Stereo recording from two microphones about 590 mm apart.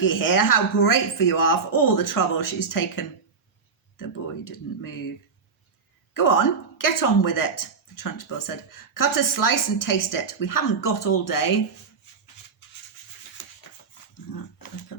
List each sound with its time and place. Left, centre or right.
0.0 s speech: left
6.1 s speech: left
13.4 s a sound: left
14.3 s speech: left